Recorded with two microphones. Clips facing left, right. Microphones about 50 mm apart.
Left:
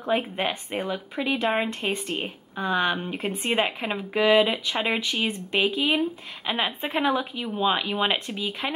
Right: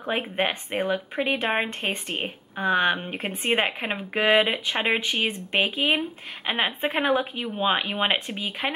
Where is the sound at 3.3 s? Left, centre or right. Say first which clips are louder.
Right 1 dB; right.